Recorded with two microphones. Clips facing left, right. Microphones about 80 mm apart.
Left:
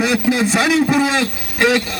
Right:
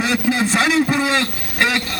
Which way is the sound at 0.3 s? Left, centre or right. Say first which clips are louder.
Left 2 dB; right.